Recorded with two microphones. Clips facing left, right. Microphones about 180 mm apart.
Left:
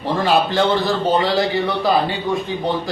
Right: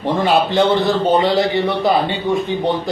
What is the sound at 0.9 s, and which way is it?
A man's voice, 20° right (ahead or behind).